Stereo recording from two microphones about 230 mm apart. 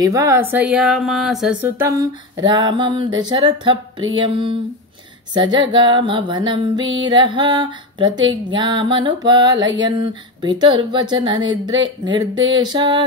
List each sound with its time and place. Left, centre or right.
0.0 s speech: centre